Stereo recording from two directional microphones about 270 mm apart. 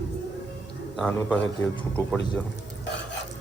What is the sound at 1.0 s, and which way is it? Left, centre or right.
Speech, centre.